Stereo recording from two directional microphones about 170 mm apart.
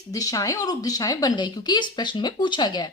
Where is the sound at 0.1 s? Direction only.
20° left (ahead or behind).